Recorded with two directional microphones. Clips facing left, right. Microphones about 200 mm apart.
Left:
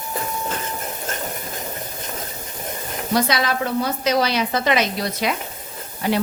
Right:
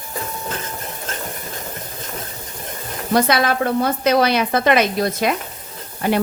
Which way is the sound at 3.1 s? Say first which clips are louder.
Right 4 dB; 55° right (ahead or behind).